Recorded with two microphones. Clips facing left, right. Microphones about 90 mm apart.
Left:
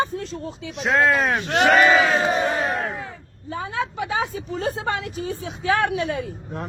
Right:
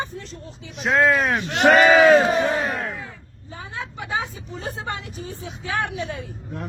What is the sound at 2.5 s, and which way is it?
Battle cry, 5° left (ahead or behind).